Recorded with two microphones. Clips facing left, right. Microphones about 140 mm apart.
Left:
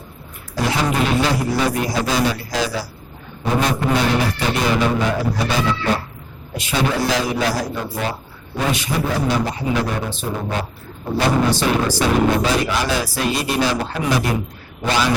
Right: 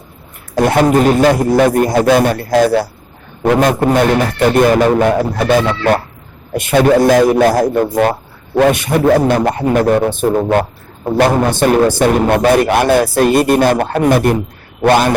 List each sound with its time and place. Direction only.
0.5 s a man's voice: 55° right (ahead or behind)